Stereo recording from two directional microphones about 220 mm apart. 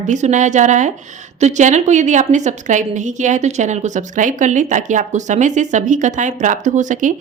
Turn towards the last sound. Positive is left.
turn(degrees=-35)  # may be behind; listen again after turning